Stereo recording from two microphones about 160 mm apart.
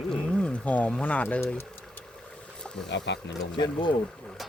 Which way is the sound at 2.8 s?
90° left.